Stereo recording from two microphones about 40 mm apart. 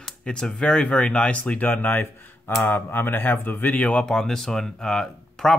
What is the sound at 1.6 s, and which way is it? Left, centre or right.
Speech, left.